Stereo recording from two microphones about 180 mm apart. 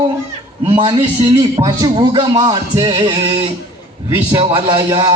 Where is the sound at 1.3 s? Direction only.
20° right (ahead or behind).